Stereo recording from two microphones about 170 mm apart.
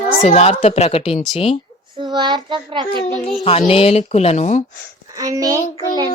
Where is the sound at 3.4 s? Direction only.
35° left (ahead or behind).